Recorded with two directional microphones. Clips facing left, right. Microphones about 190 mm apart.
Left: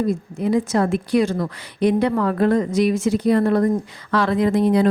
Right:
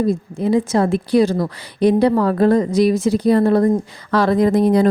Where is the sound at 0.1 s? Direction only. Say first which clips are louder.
Right 3 dB; 30° right (ahead or behind).